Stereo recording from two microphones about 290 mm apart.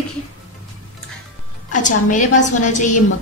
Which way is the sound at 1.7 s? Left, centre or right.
Left.